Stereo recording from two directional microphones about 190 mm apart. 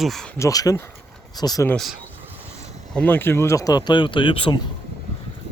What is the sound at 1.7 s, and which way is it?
Speech, centre (ahead or behind).